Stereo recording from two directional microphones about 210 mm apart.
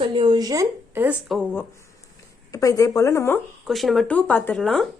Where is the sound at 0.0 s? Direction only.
20° right (ahead or behind).